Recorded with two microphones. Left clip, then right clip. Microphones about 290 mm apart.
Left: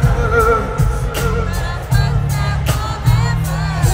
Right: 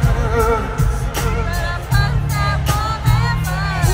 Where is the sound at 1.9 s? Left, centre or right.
Centre.